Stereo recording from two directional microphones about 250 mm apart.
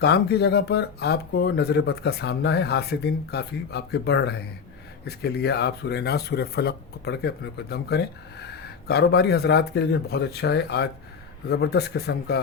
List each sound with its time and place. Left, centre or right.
0.0 s speech: left